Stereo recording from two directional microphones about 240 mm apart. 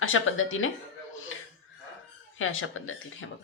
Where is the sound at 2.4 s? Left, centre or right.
Left.